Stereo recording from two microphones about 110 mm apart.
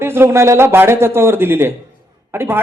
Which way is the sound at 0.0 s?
20° right (ahead or behind).